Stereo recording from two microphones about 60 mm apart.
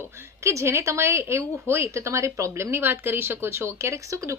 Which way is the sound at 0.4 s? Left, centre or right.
Right.